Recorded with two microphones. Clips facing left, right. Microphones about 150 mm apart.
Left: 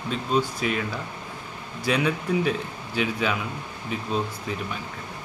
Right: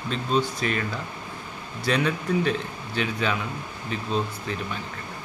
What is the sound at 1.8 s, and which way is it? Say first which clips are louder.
A man's voice: even; 10° left (ahead or behind).